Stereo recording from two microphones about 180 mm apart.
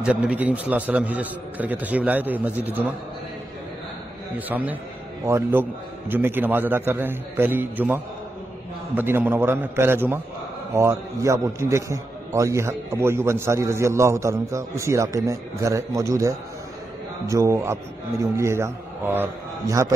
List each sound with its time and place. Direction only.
0.0 s a man's voice: 5° right (ahead or behind)
4.5 s a man's voice: 10° right (ahead or behind)